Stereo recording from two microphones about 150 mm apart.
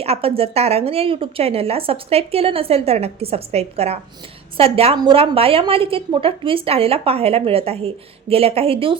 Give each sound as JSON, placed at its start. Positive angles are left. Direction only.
{"t": 0.0, "sound": "a woman's voice", "side_deg": -40}